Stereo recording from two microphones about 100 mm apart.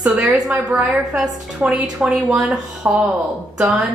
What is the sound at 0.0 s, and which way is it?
A woman's voice, 5° right (ahead or behind).